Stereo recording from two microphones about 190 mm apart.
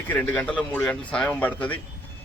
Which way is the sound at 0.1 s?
5° left (ahead or behind).